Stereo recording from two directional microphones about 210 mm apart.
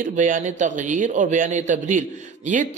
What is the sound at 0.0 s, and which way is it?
A woman's voice, 40° right (ahead or behind).